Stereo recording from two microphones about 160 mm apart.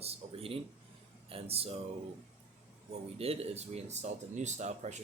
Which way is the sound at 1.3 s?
35° right (ahead or behind).